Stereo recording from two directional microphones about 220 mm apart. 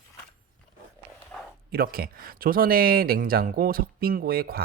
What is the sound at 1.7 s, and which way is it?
Speech, 45° right (ahead or behind).